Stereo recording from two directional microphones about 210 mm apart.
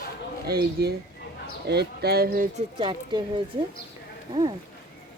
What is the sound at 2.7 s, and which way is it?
Speech, 20° right (ahead or behind).